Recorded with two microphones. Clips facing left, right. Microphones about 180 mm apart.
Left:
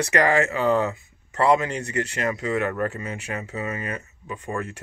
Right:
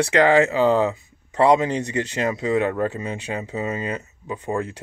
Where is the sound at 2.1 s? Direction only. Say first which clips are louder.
Right 5 dB; 25° right (ahead or behind).